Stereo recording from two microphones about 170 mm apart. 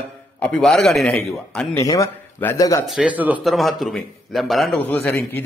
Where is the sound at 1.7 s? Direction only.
20° left (ahead or behind).